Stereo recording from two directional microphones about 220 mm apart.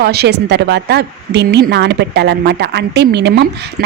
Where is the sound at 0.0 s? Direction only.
45° right (ahead or behind).